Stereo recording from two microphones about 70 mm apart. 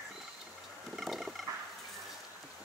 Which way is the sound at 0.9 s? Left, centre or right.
Centre.